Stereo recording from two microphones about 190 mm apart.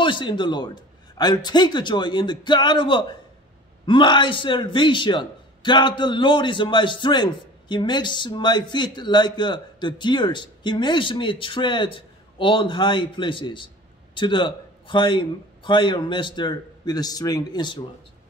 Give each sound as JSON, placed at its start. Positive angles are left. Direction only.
{"t": 0.0, "sound": "speech", "side_deg": 25}